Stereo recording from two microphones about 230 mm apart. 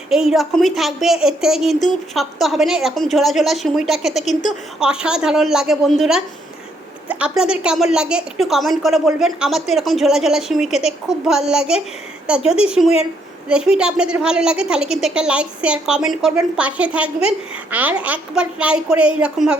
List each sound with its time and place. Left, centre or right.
0.1 s a woman's voice: centre
4.3 s a woman's voice: left
4.8 s a woman's voice: centre